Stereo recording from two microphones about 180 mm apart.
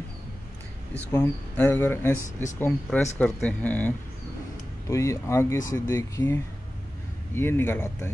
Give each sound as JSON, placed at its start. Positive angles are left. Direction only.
{"t": 1.1, "sound": "speech", "side_deg": 15}